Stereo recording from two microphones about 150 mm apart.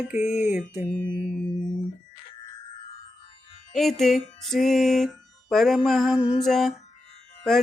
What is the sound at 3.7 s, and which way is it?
Music, centre (ahead or behind).